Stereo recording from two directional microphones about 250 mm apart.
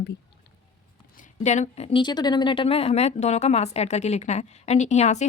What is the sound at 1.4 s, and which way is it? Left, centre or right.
Speech, left.